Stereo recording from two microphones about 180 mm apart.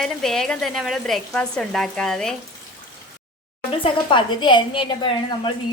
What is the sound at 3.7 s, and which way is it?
A woman's voice, 25° left (ahead or behind).